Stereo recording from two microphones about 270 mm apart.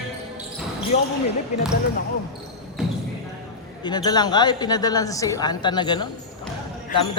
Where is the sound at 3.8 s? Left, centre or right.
Centre.